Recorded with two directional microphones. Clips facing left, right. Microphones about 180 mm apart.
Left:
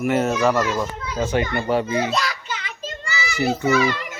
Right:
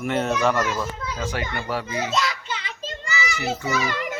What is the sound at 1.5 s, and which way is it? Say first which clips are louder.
Speech: left 7 dB; 25° left (ahead or behind).